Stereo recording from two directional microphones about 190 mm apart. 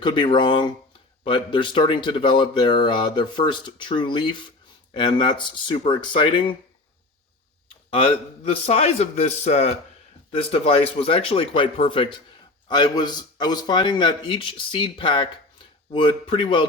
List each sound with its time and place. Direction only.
0.0 s speech: 25° left (ahead or behind)
7.9 s a man's voice: 30° left (ahead or behind)